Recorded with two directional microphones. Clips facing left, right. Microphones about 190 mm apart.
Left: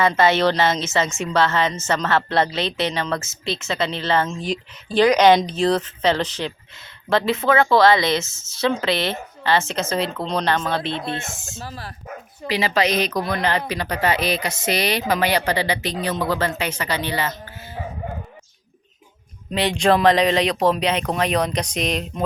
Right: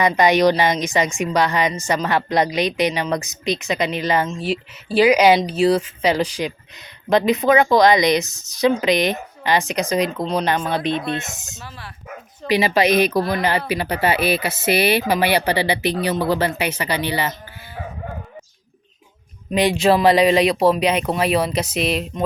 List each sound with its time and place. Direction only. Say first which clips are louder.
0.0 s a woman's voice: right 2 dB; 15° right (ahead or behind)
19.5 s a woman's voice: right 2 dB; 10° right (ahead or behind)